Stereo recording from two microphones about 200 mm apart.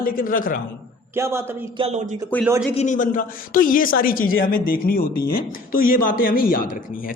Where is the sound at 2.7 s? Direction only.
35° left (ahead or behind).